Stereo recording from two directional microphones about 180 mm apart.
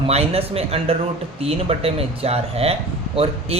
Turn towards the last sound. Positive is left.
turn(degrees=-35)  # may be behind; listen again after turning